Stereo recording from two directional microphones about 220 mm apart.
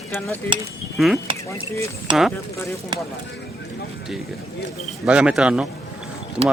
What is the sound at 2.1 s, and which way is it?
Speech, 20° right (ahead or behind).